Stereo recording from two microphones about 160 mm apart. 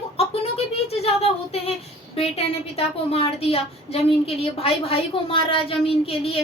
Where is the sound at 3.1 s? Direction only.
40° left (ahead or behind).